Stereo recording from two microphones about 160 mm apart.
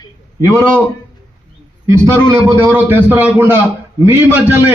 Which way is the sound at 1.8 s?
20° right (ahead or behind).